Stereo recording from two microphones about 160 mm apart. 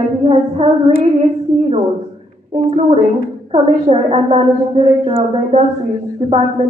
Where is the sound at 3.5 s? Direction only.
40° right (ahead or behind).